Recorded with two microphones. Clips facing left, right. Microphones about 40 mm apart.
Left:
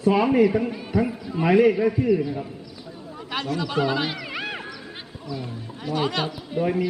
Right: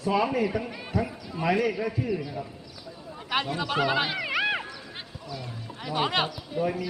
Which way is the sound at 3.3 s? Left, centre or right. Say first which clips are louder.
Left 1 dB; centre.